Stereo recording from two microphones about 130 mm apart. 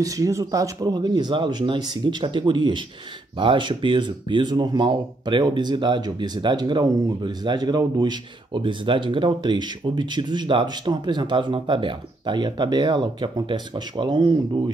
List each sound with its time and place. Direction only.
0.0 s speech: 25° right (ahead or behind)